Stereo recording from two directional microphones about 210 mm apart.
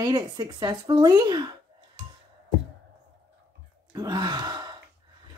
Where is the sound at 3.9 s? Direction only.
20° right (ahead or behind).